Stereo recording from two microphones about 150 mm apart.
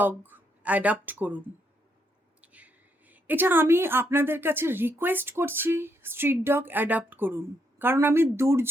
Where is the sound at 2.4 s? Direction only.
10° right (ahead or behind).